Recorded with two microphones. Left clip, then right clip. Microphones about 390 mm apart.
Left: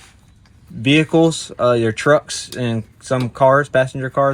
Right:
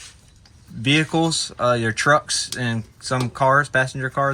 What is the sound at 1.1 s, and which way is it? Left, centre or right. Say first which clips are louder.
Speech: left 6 dB; left.